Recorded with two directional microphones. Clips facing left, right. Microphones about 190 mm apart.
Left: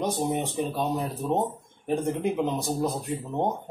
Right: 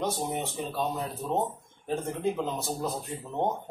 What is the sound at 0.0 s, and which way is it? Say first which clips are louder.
Speech: left 4 dB; 15° left (ahead or behind).